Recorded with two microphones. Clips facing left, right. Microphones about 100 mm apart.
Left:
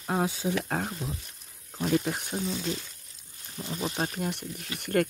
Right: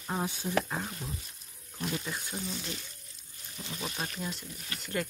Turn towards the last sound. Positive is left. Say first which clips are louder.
# left 8 dB
turn(degrees=55)  # may be behind; listen again after turning